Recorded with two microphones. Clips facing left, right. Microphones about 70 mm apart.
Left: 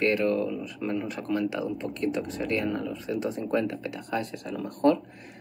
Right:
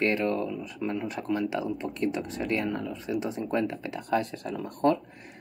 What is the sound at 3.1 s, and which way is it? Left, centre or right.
Speech, right.